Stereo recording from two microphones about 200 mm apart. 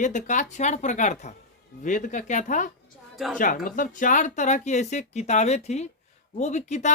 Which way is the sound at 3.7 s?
40° left (ahead or behind).